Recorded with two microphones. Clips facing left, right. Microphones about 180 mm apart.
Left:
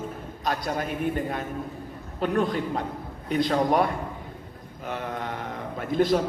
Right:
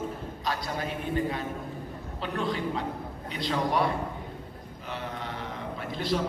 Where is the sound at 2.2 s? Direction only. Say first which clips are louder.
Left 6 dB; 45° left (ahead or behind).